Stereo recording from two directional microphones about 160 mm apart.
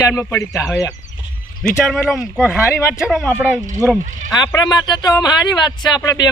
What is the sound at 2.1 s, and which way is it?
Speech, 5° right (ahead or behind).